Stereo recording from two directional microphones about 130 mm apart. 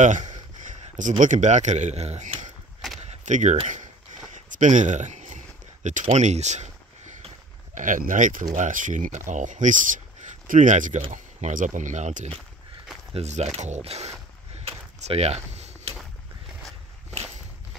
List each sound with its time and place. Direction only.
0.0 s a man's voice: 70° right (ahead or behind)
3.0 s keys jangling: 60° right (ahead or behind)
4.5 s a sound: 75° right (ahead or behind); by 7.8 s 60° right (ahead or behind)
7.8 s speech: 90° right
8.5 s speech: 75° right (ahead or behind)
11.0 s speech: 55° right (ahead or behind)
11.5 s speech: 75° right (ahead or behind)
13.1 s a man's voice: 55° right (ahead or behind)
14.7 s a sound: 55° right (ahead or behind)